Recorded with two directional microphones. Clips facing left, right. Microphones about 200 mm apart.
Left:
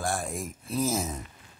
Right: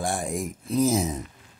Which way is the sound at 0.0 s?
15° right (ahead or behind).